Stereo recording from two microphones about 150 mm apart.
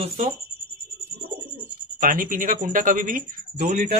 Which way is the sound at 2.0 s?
65° right (ahead or behind).